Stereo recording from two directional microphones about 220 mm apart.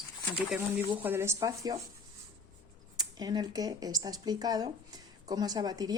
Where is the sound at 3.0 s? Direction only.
20° right (ahead or behind).